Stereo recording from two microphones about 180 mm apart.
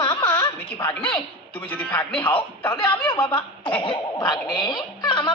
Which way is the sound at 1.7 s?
10° left (ahead or behind).